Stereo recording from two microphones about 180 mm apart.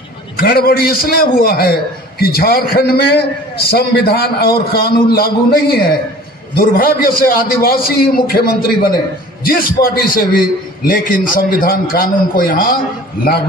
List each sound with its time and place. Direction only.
0.4 s a man's voice: 55° left (ahead or behind)